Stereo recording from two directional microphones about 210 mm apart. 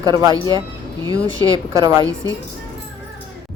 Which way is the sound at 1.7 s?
15° right (ahead or behind).